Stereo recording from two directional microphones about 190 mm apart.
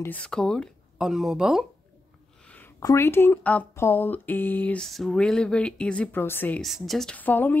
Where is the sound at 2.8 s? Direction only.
15° left (ahead or behind).